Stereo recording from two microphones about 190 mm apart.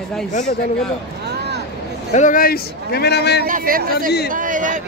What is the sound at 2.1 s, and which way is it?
A man's voice, 45° left (ahead or behind).